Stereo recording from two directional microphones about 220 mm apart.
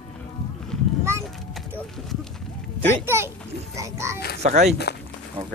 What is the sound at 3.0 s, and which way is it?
A child's voice, 10° right (ahead or behind).